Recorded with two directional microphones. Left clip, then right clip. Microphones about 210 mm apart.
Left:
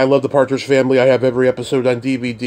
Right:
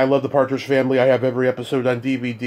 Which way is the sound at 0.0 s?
25° left (ahead or behind).